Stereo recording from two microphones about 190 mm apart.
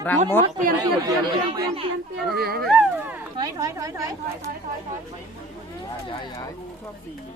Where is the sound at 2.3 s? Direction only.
55° right (ahead or behind).